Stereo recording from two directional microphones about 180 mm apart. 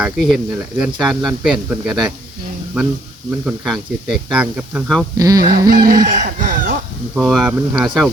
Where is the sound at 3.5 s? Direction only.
5° right (ahead or behind).